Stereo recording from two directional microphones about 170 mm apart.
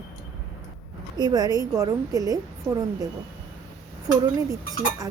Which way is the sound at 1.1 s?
25° right (ahead or behind).